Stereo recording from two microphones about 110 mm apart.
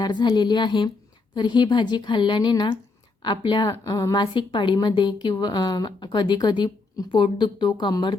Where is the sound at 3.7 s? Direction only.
30° left (ahead or behind).